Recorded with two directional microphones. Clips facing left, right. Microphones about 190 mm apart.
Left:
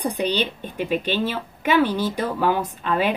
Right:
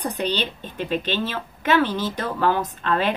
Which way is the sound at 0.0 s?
10° left (ahead or behind).